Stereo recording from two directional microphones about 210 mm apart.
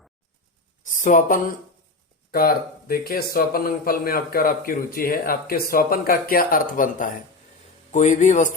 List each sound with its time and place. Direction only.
0.9 s a man's voice: 35° left (ahead or behind)